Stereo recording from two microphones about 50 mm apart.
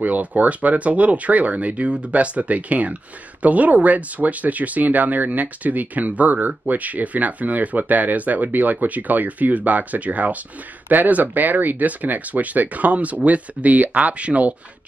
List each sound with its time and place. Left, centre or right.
0.0 s speech: right